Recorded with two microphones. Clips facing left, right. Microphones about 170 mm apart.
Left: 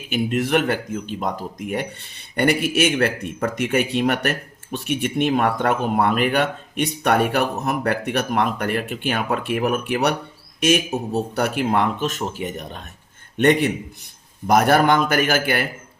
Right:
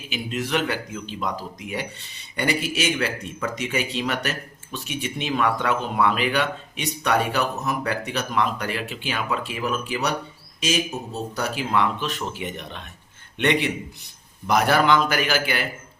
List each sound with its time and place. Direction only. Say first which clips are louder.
0.1 s speech: left 6 dB; 55° left (ahead or behind)